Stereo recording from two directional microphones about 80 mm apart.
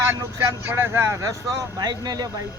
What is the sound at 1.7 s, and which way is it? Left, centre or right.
Speech, right.